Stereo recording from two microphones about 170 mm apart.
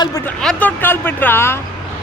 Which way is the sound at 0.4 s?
10° left (ahead or behind).